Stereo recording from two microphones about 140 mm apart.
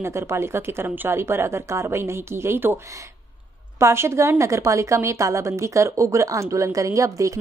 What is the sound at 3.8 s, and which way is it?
Speech, 20° right (ahead or behind).